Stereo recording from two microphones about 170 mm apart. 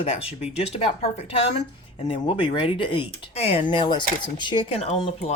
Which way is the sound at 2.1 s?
30° left (ahead or behind).